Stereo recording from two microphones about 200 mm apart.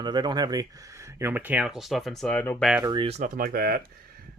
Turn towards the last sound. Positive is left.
turn(degrees=-50)  # may be behind; listen again after turning